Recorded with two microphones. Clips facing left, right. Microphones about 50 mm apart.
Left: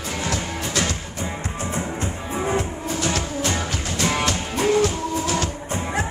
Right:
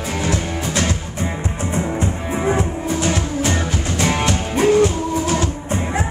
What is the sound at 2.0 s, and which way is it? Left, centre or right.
Music, right.